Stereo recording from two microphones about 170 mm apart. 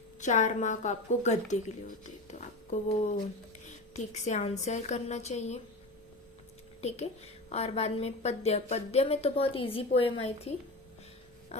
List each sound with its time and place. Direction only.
0.2 s a woman's voice: 45° left (ahead or behind)
6.8 s a woman's voice: 40° left (ahead or behind)